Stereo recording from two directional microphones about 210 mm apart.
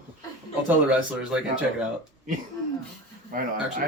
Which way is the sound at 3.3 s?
40° right (ahead or behind).